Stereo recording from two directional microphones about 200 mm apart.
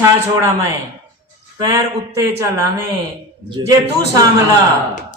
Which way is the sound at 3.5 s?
20° right (ahead or behind).